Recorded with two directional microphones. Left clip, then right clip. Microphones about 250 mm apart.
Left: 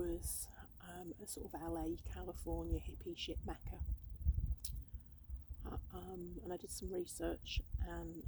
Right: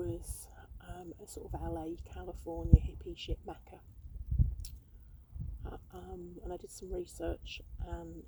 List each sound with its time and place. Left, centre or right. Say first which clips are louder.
0.0 s speech: right 2 dB; left
4.6 s a sound: left 1 dB; left
5.6 s speech: right 2 dB; left